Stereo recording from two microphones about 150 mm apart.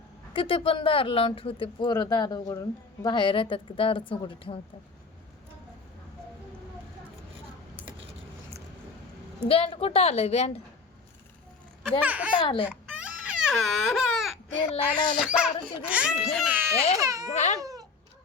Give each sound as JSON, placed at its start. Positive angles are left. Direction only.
{"t": 0.3, "sound": "speech", "side_deg": 35}
{"t": 9.5, "sound": "speech", "side_deg": 40}
{"t": 11.8, "sound": "speech", "side_deg": -10}
{"t": 12.4, "sound": "speech", "side_deg": 35}
{"t": 12.6, "sound": "crying", "side_deg": -10}
{"t": 14.8, "sound": "speech", "side_deg": 30}
{"t": 15.2, "sound": "a child's voice", "side_deg": -5}
{"t": 17.0, "sound": "speech", "side_deg": -20}
{"t": 17.2, "sound": "baby cry", "side_deg": 50}
{"t": 17.6, "sound": "cat", "side_deg": -25}